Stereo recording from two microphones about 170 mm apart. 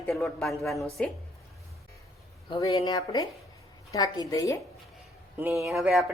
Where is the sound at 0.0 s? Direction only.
5° left (ahead or behind).